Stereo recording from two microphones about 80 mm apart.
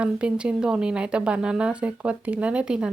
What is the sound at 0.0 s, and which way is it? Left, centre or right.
A woman's voice, centre.